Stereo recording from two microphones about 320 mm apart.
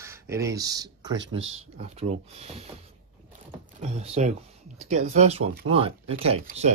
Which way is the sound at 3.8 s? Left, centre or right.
Centre.